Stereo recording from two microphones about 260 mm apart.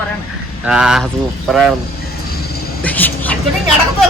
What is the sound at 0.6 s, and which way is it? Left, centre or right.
Speech, centre.